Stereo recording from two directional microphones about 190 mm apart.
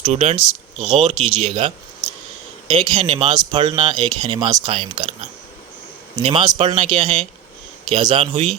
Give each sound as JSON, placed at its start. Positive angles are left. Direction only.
{"t": 0.0, "sound": "speech", "side_deg": -35}
{"t": 0.3, "sound": "speech", "side_deg": 0}
{"t": 0.9, "sound": "speech", "side_deg": -30}
{"t": 6.1, "sound": "speech", "side_deg": -25}